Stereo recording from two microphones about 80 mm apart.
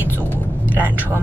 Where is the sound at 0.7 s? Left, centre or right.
Right.